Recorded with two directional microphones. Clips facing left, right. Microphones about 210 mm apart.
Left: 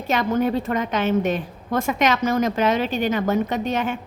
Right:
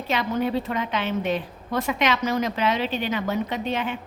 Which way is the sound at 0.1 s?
45° left (ahead or behind).